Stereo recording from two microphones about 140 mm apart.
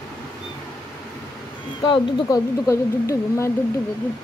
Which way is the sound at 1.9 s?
25° left (ahead or behind).